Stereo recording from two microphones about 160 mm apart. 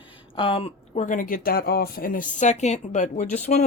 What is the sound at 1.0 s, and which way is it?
Speech, 60° left (ahead or behind).